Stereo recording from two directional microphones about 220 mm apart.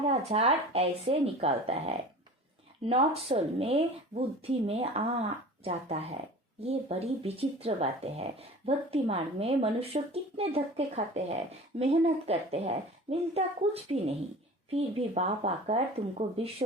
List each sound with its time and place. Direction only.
0.1 s speech: 30° right (ahead or behind)